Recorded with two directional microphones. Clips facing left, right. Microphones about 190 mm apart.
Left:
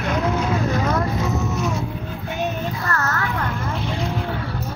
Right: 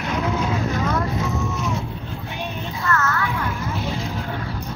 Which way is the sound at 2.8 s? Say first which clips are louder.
Right 5 dB; 35° left (ahead or behind).